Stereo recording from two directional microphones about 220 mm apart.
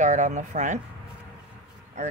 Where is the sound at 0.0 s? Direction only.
35° right (ahead or behind).